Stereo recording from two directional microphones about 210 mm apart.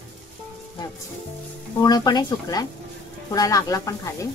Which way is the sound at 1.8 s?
20° left (ahead or behind).